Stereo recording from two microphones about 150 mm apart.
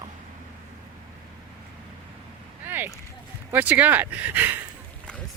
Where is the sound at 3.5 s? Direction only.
10° right (ahead or behind).